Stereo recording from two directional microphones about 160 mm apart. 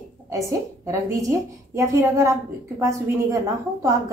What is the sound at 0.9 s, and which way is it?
A woman's voice, 20° right (ahead or behind).